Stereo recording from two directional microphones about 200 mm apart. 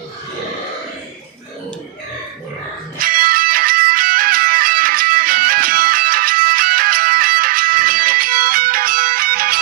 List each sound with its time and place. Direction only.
3.0 s music: 45° right (ahead or behind)